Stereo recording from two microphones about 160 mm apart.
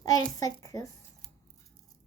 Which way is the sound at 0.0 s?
20° left (ahead or behind).